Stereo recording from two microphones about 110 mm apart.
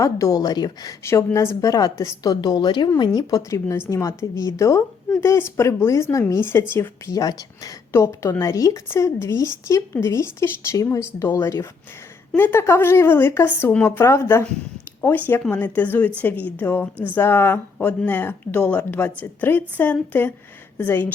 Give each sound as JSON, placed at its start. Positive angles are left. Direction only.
{"t": 0.0, "sound": "a woman's voice", "side_deg": 30}
{"t": 1.0, "sound": "a woman's voice", "side_deg": 25}
{"t": 3.5, "sound": "speech", "side_deg": 25}
{"t": 15.3, "sound": "a woman's voice", "side_deg": 15}